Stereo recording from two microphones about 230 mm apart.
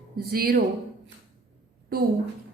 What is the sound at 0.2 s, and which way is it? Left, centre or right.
Speech, right.